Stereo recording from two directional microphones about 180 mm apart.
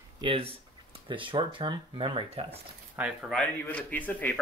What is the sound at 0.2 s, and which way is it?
Speech, 30° right (ahead or behind).